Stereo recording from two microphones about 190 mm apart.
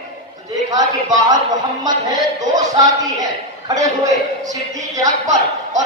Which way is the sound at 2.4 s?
20° right (ahead or behind).